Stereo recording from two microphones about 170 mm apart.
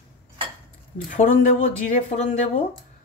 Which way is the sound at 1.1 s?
45° left (ahead or behind).